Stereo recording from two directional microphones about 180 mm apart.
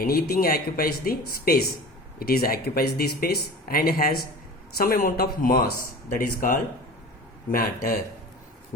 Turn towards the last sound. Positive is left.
turn(degrees=50)  # may be behind; listen again after turning